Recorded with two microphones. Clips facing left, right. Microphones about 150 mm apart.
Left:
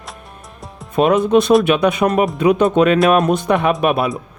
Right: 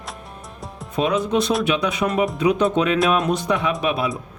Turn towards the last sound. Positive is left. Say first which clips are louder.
# left 6 dB
turn(degrees=60)  # may be behind; listen again after turning